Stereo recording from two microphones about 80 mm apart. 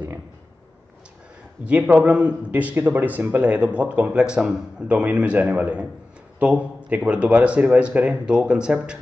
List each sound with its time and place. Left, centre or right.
1.7 s a man's voice: centre